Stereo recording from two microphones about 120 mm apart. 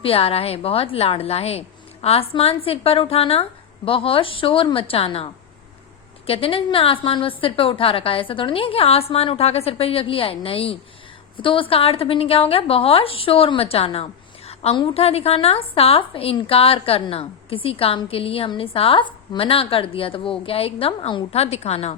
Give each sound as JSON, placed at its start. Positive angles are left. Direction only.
{"t": 0.0, "sound": "speech", "side_deg": 55}
{"t": 21.3, "sound": "a woman's voice", "side_deg": 60}